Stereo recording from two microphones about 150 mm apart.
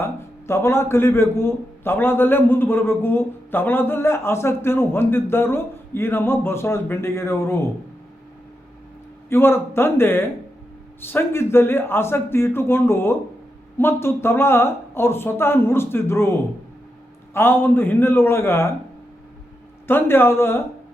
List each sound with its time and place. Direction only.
0.0 s a man's voice: 15° left (ahead or behind)
9.3 s a man's voice: 15° left (ahead or behind)
17.3 s a man's voice: 15° left (ahead or behind)
19.9 s a man's voice: 15° left (ahead or behind)